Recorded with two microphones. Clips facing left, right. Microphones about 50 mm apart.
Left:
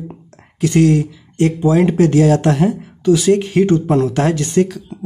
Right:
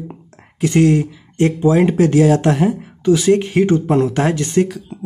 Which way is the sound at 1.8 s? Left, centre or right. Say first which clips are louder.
Left 1 dB; centre.